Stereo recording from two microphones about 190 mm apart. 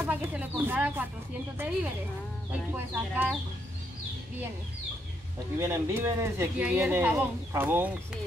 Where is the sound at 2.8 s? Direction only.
10° right (ahead or behind).